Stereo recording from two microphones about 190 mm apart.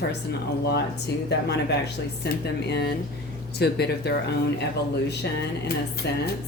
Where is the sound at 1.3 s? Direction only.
65° left (ahead or behind).